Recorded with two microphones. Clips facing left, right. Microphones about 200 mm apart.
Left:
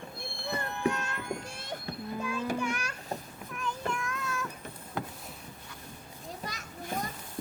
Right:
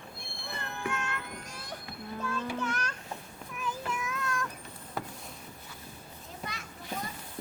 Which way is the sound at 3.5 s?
5° right (ahead or behind).